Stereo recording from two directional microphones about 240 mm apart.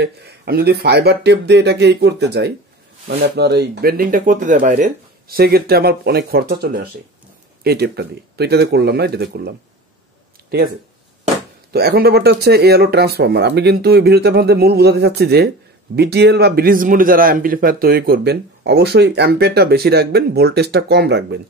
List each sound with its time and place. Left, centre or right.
0.0 s a man's voice: right
11.7 s a man's voice: right